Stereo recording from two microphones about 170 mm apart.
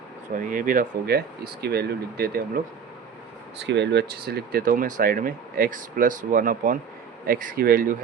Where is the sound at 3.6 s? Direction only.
90° right.